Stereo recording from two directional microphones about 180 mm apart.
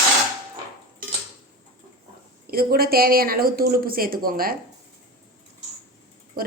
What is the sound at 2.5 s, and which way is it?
A woman's voice, 55° right (ahead or behind).